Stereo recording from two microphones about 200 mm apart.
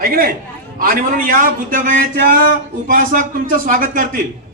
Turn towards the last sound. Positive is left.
turn(degrees=-45)  # may be behind; listen again after turning